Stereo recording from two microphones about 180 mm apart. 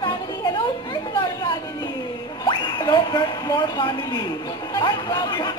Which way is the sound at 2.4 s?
20° left (ahead or behind).